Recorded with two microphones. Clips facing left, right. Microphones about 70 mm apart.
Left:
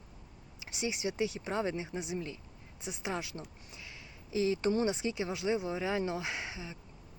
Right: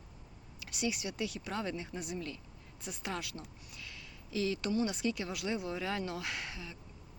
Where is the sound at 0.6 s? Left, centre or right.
Left.